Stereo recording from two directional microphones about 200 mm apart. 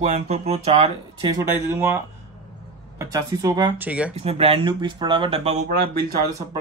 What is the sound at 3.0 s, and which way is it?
Speech, 15° right (ahead or behind).